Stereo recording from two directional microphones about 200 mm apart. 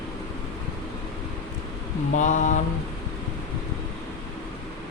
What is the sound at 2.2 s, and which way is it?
Speech, 40° left (ahead or behind).